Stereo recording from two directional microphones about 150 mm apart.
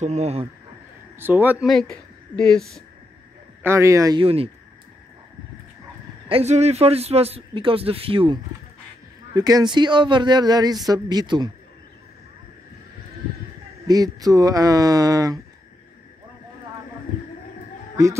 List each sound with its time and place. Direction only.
0.0 s speech: 45° right (ahead or behind)
1.1 s speech: 15° right (ahead or behind)
1.7 s speech: 5° left (ahead or behind)
3.6 s a man's voice: 20° right (ahead or behind)
4.2 s speech: 40° right (ahead or behind)
6.2 s speech: 45° right (ahead or behind)
9.3 s a man's voice: 25° right (ahead or behind)
13.8 s a man's voice: 25° right (ahead or behind)